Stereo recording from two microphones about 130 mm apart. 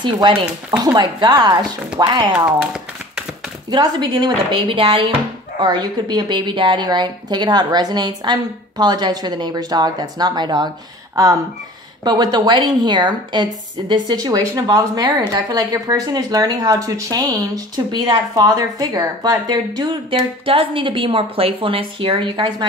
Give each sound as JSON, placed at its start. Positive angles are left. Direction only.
{"t": 0.0, "sound": "a woman's voice", "side_deg": -35}
{"t": 2.3, "sound": "tap", "side_deg": -5}
{"t": 3.7, "sound": "a woman's voice", "side_deg": -35}
{"t": 12.0, "sound": "a woman's voice", "side_deg": -35}